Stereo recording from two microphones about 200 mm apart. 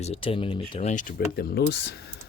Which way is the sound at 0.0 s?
30° left (ahead or behind).